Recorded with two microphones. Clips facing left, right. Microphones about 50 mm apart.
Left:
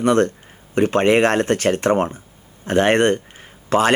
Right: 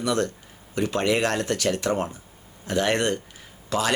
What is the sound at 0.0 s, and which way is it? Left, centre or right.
Speech, left.